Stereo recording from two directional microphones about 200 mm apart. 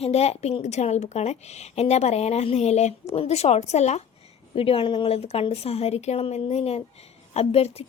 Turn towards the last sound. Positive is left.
turn(degrees=30)  # may be behind; listen again after turning